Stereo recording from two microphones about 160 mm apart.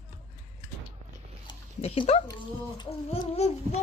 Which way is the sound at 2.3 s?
25° left (ahead or behind).